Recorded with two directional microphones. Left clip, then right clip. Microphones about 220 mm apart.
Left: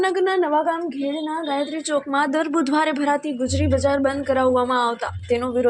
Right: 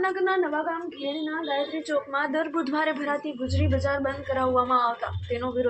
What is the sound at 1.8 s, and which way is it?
A woman's voice, 50° left (ahead or behind).